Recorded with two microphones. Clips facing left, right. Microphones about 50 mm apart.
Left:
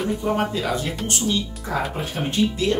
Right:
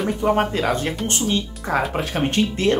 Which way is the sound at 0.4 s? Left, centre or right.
Right.